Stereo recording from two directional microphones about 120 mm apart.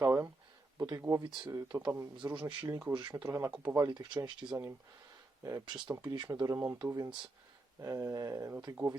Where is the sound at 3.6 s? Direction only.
25° right (ahead or behind).